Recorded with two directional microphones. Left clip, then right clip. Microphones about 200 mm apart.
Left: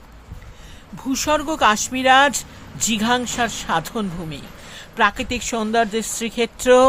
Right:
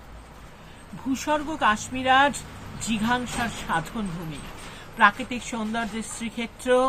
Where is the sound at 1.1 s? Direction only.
60° left (ahead or behind).